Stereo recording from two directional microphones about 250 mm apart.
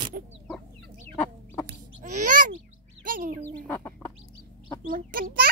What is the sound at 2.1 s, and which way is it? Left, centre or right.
Bird, right.